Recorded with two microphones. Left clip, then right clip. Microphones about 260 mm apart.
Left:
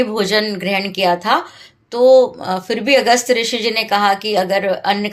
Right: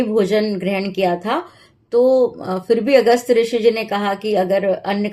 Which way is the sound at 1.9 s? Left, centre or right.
Left.